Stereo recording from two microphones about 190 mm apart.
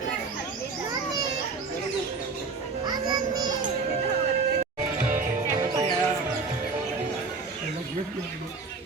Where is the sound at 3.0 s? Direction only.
20° right (ahead or behind).